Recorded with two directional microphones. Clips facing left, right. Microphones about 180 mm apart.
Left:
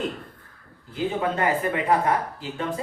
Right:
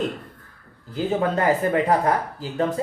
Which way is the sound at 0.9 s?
40° right (ahead or behind).